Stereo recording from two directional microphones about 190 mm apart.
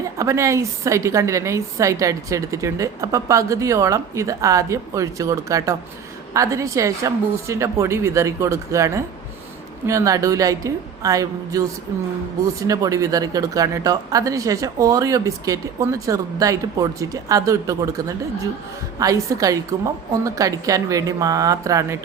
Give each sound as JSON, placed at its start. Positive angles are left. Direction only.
{"t": 0.2, "sound": "a woman's voice", "side_deg": -15}